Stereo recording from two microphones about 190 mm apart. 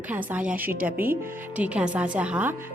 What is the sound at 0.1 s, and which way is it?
A woman's voice, 10° right (ahead or behind).